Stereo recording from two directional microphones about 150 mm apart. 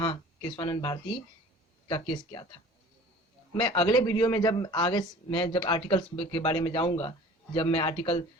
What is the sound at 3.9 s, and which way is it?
A man's voice, 25° left (ahead or behind).